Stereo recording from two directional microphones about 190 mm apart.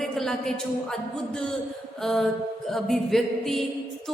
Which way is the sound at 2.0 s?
Centre (ahead or behind).